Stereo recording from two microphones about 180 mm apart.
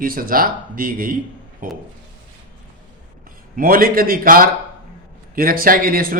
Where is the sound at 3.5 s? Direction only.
50° right (ahead or behind).